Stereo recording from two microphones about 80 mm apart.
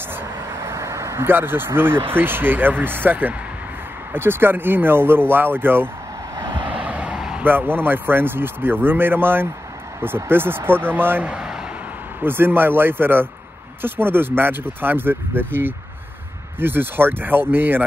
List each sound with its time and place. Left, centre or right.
0.5 s speech: right
6.5 s vehicle: right
7.4 s speech: right
11.2 s a man's voice: centre
12.2 s speech: right